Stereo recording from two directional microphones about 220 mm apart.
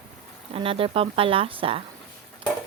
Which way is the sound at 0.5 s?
25° right (ahead or behind).